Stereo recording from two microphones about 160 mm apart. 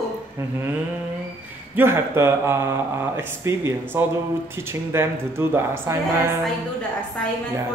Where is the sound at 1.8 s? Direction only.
15° right (ahead or behind).